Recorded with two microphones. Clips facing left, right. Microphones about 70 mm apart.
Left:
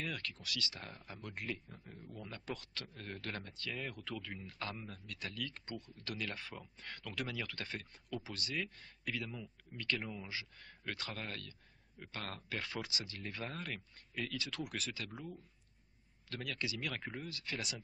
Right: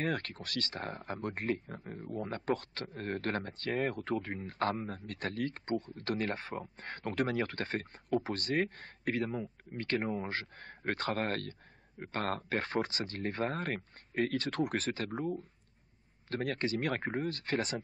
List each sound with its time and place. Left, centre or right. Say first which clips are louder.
0.0 s speech: right 8 dB; right